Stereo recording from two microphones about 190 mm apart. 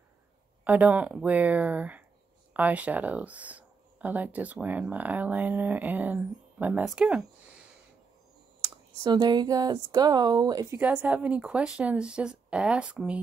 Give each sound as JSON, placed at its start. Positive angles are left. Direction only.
{"t": 0.7, "sound": "speech", "side_deg": -10}
{"t": 8.6, "sound": "speech", "side_deg": -20}
{"t": 10.8, "sound": "speech", "side_deg": -10}